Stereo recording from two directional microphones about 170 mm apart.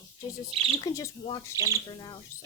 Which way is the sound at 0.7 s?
20° left (ahead or behind).